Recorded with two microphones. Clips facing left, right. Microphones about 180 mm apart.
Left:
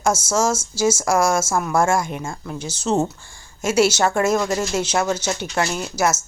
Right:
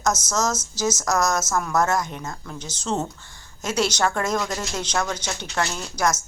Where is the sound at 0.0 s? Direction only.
10° left (ahead or behind).